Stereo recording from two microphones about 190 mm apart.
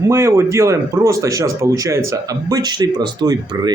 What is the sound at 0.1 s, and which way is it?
Speech, 15° right (ahead or behind).